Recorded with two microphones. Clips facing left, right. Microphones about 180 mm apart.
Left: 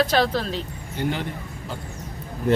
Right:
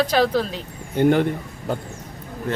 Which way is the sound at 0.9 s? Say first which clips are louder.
Right 10 dB; 55° right (ahead or behind).